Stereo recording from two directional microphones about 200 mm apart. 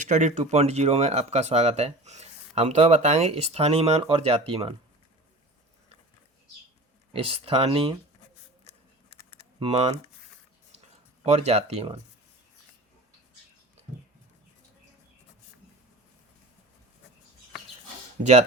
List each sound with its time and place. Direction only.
0.0 s speech: 35° right (ahead or behind)
7.1 s speech: 30° right (ahead or behind)
9.6 s speech: 30° right (ahead or behind)
11.3 s speech: 35° right (ahead or behind)